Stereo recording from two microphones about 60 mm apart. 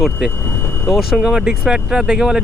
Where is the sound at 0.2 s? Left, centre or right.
Centre.